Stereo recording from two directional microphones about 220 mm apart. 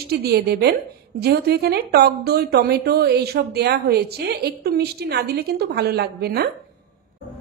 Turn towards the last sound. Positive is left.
turn(degrees=-45)  # may be behind; listen again after turning